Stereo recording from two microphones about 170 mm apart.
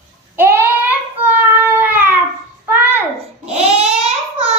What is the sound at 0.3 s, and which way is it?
Child singing, 10° right (ahead or behind).